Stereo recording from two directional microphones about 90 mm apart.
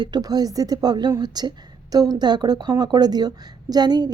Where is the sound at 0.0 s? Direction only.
50° right (ahead or behind).